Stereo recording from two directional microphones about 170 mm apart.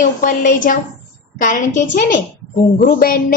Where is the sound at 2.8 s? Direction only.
55° left (ahead or behind).